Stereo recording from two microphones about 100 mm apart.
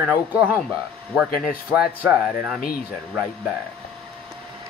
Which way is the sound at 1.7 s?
5° right (ahead or behind).